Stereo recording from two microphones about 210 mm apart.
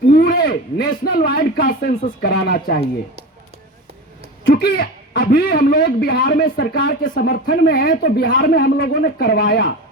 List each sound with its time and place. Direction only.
0.0 s speech: 45° left (ahead or behind)
4.5 s speech: 45° left (ahead or behind)